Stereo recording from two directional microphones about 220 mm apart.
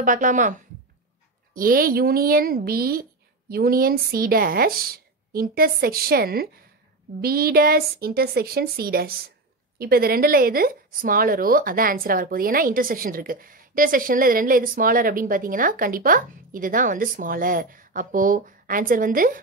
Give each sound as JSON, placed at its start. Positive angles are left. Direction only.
{"t": 0.0, "sound": "a woman's voice", "side_deg": -35}